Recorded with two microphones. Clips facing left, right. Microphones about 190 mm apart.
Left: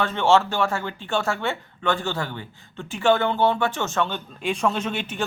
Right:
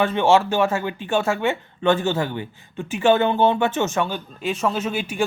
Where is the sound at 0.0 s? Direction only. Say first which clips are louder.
Right 2 dB; 15° right (ahead or behind).